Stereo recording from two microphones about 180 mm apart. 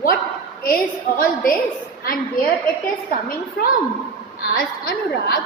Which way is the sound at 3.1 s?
55° left (ahead or behind).